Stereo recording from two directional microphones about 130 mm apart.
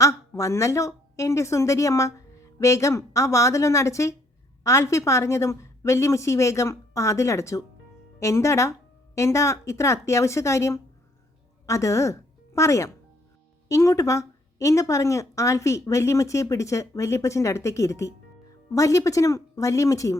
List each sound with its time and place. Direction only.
0.0 s a woman's voice: 25° left (ahead or behind)